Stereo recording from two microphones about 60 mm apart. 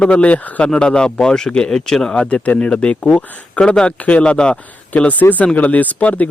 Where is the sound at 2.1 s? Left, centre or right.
Left.